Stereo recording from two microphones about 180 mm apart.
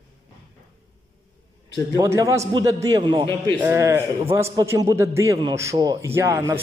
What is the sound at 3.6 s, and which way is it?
A man's voice, 15° right (ahead or behind).